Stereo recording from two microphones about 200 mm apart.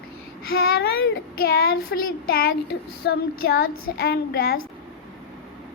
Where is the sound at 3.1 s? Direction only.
50° left (ahead or behind).